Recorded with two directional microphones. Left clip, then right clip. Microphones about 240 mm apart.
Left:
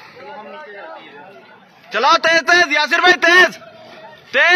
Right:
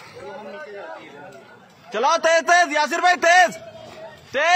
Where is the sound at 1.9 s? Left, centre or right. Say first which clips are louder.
Left 5 dB; centre.